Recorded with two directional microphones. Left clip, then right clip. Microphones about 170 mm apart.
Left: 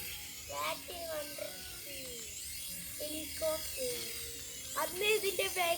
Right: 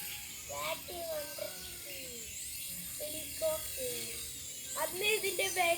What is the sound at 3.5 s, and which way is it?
Speech, 35° left (ahead or behind).